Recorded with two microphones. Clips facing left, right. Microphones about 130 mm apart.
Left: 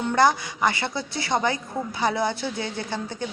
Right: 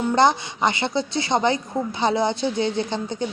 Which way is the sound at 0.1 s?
25° right (ahead or behind).